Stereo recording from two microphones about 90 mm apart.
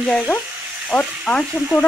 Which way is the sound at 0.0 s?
10° left (ahead or behind).